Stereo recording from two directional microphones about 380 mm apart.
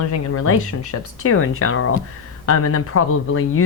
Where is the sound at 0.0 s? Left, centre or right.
Left.